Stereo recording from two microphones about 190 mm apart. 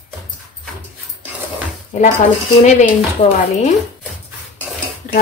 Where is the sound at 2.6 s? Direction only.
40° left (ahead or behind).